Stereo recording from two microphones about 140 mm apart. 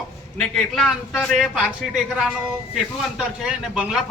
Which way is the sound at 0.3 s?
5° left (ahead or behind).